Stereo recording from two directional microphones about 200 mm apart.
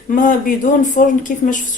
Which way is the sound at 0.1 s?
45° left (ahead or behind).